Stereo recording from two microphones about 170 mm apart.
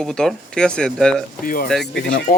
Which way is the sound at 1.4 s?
55° left (ahead or behind).